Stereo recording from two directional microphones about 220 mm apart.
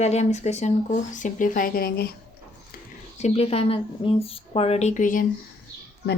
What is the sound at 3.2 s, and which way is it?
Speech, 25° left (ahead or behind).